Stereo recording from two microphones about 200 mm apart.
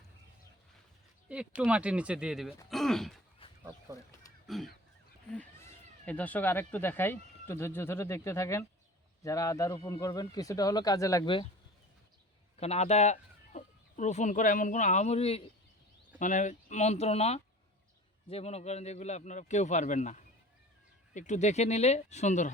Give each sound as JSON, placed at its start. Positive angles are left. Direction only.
{"t": 1.3, "sound": "speech", "side_deg": -5}
{"t": 3.6, "sound": "a sound", "side_deg": -20}
{"t": 4.4, "sound": "a sound", "side_deg": 0}
{"t": 5.3, "sound": "cat", "side_deg": 5}
{"t": 6.1, "sound": "speech", "side_deg": 5}
{"t": 12.5, "sound": "a man's voice", "side_deg": 30}